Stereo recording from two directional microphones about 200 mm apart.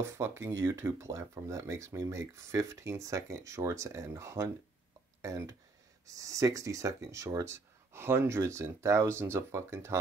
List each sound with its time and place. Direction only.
0.0 s speech: 15° right (ahead or behind)